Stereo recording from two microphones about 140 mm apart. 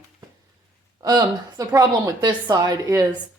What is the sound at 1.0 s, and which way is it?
Speech, 25° right (ahead or behind).